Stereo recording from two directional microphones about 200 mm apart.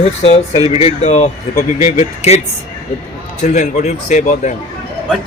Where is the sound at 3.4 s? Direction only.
35° left (ahead or behind).